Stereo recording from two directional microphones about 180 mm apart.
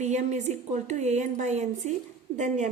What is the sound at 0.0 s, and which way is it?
A woman's voice, 40° right (ahead or behind).